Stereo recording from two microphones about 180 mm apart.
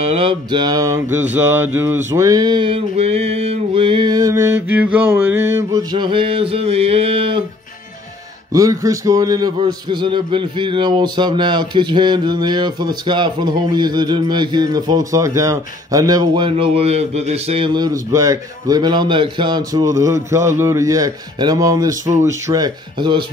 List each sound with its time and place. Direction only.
0.0 s a man's voice: 30° right (ahead or behind)
8.5 s a man's voice: 20° right (ahead or behind)